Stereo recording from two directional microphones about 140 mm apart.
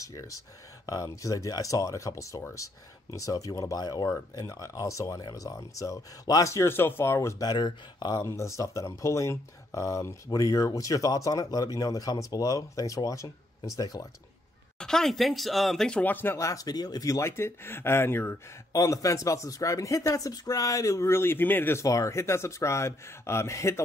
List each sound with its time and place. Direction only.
0.0 s speech: 25° left (ahead or behind)
14.8 s speech: 5° left (ahead or behind); by 23.8 s 20° left (ahead or behind)